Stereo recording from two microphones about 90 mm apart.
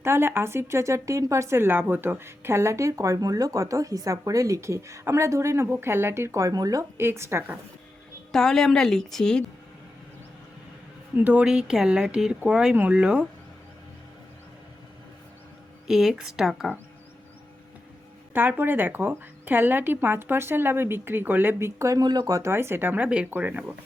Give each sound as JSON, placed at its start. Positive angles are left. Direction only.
{"t": 0.0, "sound": "a woman's voice", "side_deg": -25}
{"t": 6.9, "sound": "a woman's voice", "side_deg": -30}
{"t": 8.3, "sound": "a woman's voice", "side_deg": 5}
{"t": 11.2, "sound": "speech", "side_deg": -15}
{"t": 15.9, "sound": "a woman's voice", "side_deg": -5}
{"t": 18.3, "sound": "a woman's voice", "side_deg": -20}
{"t": 22.0, "sound": "speech", "side_deg": -50}
{"t": 22.4, "sound": "a woman's voice", "side_deg": -30}